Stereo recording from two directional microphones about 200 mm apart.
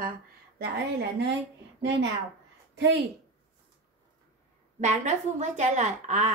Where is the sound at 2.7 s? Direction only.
60° right (ahead or behind).